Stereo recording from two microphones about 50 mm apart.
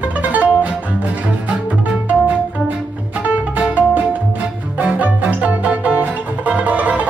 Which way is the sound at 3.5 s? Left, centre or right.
Right.